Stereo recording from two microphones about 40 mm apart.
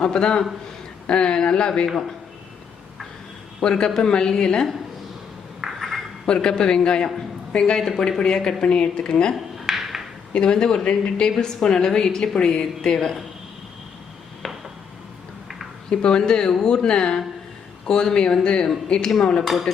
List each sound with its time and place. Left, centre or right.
0.0 s speech: left
3.6 s speech: centre
5.8 s a sound: centre
6.2 s speech: centre
9.3 s a sound: centre
10.3 s speech: left
14.4 s a sound: centre
15.9 s speech: left
19.5 s speech: centre